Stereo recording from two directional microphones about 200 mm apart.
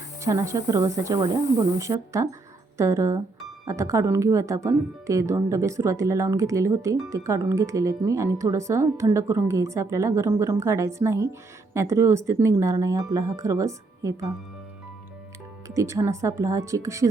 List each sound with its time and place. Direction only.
0.2 s speech: 15° right (ahead or behind)
15.6 s speech: 15° right (ahead or behind)